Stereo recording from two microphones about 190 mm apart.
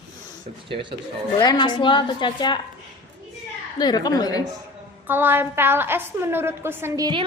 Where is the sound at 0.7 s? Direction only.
25° right (ahead or behind).